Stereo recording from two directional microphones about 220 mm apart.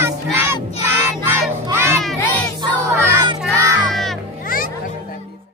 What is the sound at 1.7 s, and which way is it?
Crowd, 10° right (ahead or behind).